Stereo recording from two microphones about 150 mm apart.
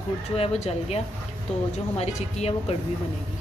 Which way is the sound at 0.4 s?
45° left (ahead or behind).